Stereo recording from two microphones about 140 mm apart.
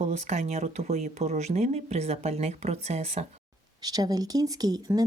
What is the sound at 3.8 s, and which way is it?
Speech, 30° right (ahead or behind).